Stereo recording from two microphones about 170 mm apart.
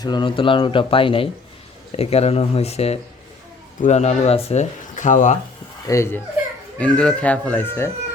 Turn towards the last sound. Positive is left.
turn(degrees=15)  # may be behind; listen again after turning